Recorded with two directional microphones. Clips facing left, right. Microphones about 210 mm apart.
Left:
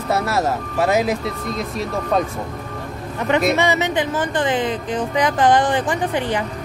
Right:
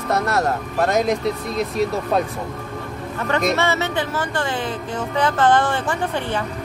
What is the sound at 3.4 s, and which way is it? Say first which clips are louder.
Speech: even; 15° left (ahead or behind).